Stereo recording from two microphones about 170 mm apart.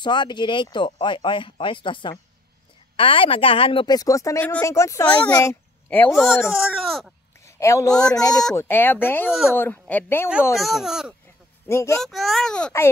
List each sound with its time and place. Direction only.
0.0 s a child's voice: 25° left (ahead or behind); by 7.1 s centre (ahead or behind)
7.4 s a sound: 15° left (ahead or behind)
7.9 s a child's voice: 5° left (ahead or behind)
10.6 s a child's voice: centre (ahead or behind)
11.6 s speech: 15° left (ahead or behind)
12.0 s a child's voice: centre (ahead or behind)